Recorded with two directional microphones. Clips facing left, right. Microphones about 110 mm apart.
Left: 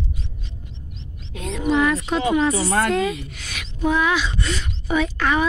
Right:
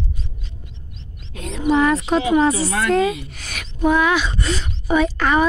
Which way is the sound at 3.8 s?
60° right (ahead or behind).